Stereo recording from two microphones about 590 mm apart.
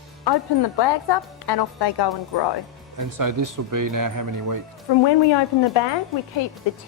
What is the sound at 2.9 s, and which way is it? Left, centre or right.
Speech, right.